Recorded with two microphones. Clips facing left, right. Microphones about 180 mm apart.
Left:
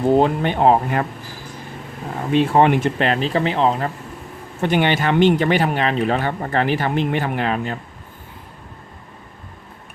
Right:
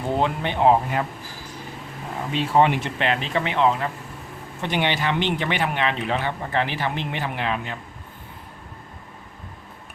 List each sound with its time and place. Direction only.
0.2 s speech: 50° left (ahead or behind)
2.3 s speech: 50° left (ahead or behind); by 3.8 s 35° left (ahead or behind)
4.6 s speech: 50° left (ahead or behind)